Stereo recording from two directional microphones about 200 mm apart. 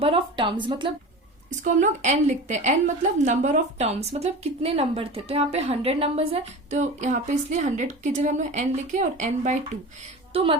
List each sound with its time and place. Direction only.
0.0 s speech: 25° right (ahead or behind)
1.6 s a woman's voice: 35° right (ahead or behind)
10.3 s speech: 25° right (ahead or behind)